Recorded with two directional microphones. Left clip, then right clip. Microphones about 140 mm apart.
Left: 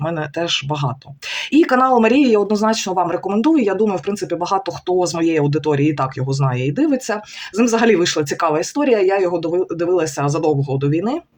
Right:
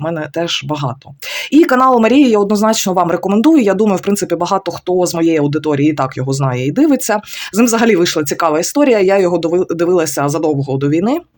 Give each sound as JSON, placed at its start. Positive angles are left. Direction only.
{"t": 0.0, "sound": "speech", "side_deg": -35}